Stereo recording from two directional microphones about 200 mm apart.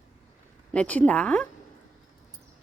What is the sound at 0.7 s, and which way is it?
Speech, 5° left (ahead or behind).